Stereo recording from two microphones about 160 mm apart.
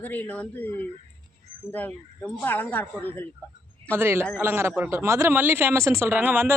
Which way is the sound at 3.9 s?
15° right (ahead or behind).